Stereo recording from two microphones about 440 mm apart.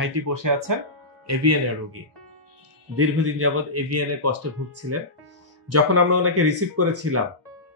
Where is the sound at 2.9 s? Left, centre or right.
Right.